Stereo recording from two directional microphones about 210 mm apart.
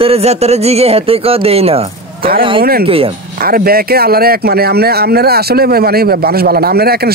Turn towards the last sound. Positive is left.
turn(degrees=-50)  # may be behind; listen again after turning